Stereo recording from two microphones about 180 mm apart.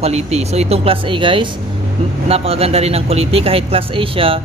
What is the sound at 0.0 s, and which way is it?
A man's voice, 35° right (ahead or behind).